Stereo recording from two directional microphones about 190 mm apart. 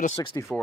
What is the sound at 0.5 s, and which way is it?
Speech, centre (ahead or behind).